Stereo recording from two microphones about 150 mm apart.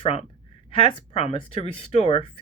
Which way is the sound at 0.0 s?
45° left (ahead or behind).